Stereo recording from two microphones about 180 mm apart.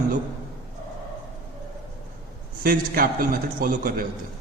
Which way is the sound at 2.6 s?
55° right (ahead or behind).